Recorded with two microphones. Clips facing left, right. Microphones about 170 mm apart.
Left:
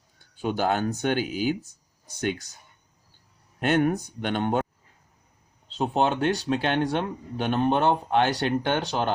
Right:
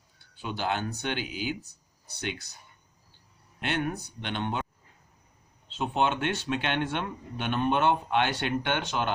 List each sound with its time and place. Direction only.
0.2 s speech: 45° left (ahead or behind)
3.6 s speech: 50° left (ahead or behind)
5.6 s speech: 35° left (ahead or behind)